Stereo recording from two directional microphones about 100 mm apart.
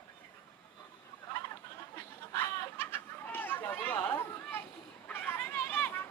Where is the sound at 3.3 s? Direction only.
20° left (ahead or behind).